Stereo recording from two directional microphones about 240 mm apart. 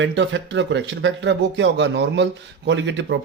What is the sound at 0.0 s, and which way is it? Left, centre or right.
Speech, right.